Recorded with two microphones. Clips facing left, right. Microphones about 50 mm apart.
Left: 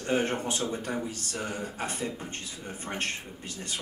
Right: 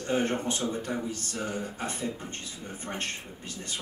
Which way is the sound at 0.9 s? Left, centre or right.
Centre.